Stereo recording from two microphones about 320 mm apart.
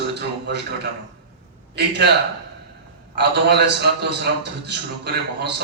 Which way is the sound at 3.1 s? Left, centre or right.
Right.